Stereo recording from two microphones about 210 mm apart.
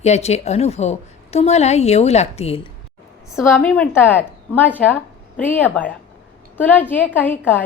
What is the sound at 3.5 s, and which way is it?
Speech, 10° left (ahead or behind).